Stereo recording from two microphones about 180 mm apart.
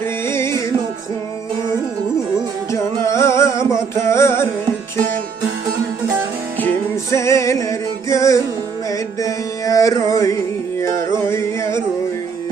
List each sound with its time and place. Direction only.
0.3 s music: 15° left (ahead or behind)
2.7 s music: 15° left (ahead or behind)
6.6 s music: 15° left (ahead or behind)
8.9 s mantra: 20° left (ahead or behind)
10.8 s music: 15° left (ahead or behind)